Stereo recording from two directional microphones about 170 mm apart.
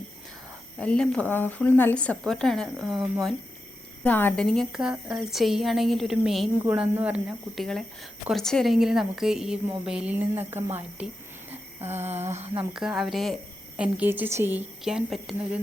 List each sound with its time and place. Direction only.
0.8 s a woman's voice: 5° left (ahead or behind)
4.0 s a woman's voice: 10° left (ahead or behind); by 12.0 s 15° right (ahead or behind)
12.0 s speech: 40° right (ahead or behind)
12.7 s a woman's voice: 5° right (ahead or behind)